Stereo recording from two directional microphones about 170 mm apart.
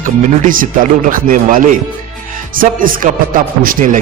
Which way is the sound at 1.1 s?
55° right (ahead or behind).